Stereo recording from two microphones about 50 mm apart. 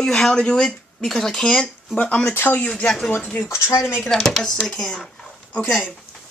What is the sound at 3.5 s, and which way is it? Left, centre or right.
Speech, left.